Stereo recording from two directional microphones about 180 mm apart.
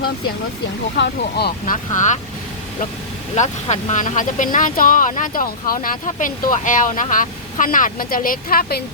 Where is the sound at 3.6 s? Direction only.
40° left (ahead or behind).